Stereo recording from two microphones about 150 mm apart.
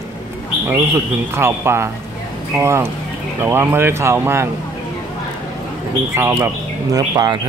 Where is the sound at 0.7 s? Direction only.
15° right (ahead or behind).